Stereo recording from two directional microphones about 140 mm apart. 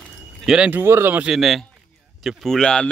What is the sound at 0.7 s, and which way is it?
Speech, 15° right (ahead or behind).